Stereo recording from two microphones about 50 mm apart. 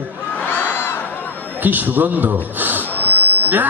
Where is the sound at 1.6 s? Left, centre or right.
Right.